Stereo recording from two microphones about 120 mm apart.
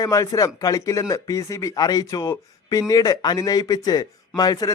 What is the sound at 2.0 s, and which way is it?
Speech, 25° left (ahead or behind).